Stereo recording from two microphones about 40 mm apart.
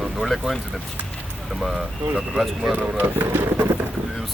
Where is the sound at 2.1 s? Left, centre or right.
Centre.